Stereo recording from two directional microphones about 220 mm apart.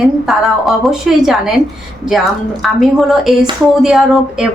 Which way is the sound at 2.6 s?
Centre (ahead or behind).